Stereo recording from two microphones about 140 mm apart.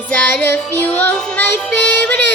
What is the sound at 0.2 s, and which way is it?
Child singing, 10° left (ahead or behind).